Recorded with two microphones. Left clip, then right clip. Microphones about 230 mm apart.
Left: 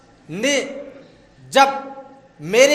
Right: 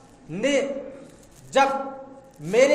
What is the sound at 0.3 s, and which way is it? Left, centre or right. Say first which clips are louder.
A man's voice: left 3 dB; left.